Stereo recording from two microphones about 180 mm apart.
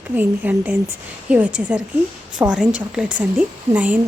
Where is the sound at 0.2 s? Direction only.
10° right (ahead or behind).